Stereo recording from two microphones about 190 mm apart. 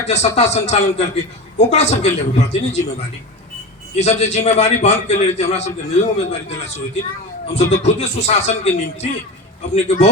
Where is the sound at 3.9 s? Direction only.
35° left (ahead or behind).